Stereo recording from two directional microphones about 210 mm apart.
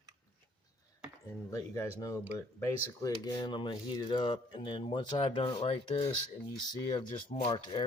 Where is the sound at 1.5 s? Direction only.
15° left (ahead or behind).